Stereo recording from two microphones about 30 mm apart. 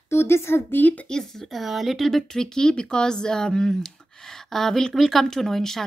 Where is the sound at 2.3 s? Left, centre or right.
Left.